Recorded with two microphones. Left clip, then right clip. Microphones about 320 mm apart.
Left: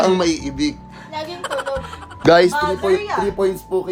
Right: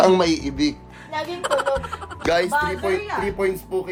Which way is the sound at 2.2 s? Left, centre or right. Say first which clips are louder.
Left 8 dB; left.